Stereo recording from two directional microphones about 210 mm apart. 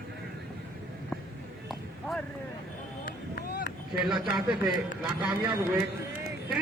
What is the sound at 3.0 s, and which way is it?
Vehicle, 50° left (ahead or behind).